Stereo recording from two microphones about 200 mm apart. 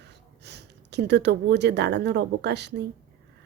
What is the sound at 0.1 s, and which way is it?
Speech, 55° right (ahead or behind).